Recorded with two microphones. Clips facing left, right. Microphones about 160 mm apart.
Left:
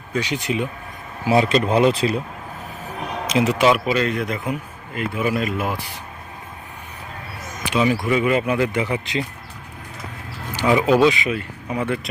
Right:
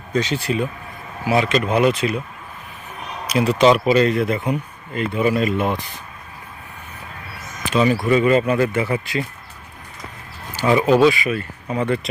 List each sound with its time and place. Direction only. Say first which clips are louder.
0.1 s speech: right 2 dB; 15° left (ahead or behind)
1.3 s speech: left 1 dB; 30° left (ahead or behind)
3.2 s speech: right 1 dB; 20° left (ahead or behind)
3.6 s speech: right 7 dB; 5° left (ahead or behind)
7.6 s a sound: right 2 dB; 10° left (ahead or behind)
8.0 s speech: right 3 dB; 10° left (ahead or behind)
10.5 s speech: right 1 dB; 15° left (ahead or behind)